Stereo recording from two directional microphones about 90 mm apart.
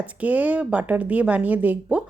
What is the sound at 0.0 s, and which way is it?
Speech, 15° right (ahead or behind).